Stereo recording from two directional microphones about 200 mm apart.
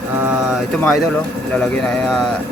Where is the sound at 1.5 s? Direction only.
5° left (ahead or behind).